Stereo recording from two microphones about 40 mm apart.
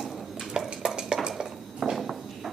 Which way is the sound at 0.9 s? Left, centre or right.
Centre.